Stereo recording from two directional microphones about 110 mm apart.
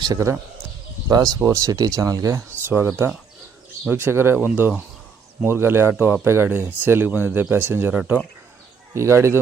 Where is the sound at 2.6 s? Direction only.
20° right (ahead or behind).